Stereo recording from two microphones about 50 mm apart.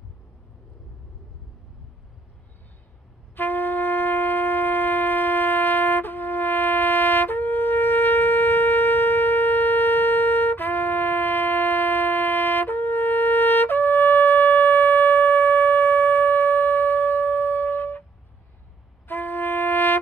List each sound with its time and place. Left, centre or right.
3.3 s shofar: left
19.0 s music: left